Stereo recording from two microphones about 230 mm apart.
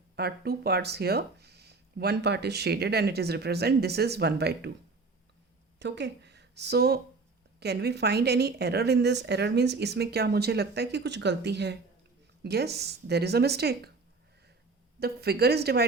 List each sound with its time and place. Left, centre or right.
0.2 s speech: right
5.8 s speech: right
15.0 s speech: right